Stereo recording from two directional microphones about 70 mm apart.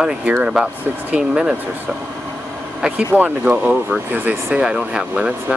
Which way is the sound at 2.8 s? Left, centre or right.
Centre.